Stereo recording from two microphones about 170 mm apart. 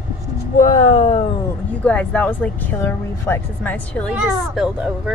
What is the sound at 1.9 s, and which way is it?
A woman's voice, 10° left (ahead or behind).